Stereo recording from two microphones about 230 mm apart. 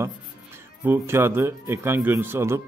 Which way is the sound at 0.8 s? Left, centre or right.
Centre.